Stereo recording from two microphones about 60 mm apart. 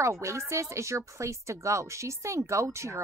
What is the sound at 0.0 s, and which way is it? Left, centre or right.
A woman's voice, right.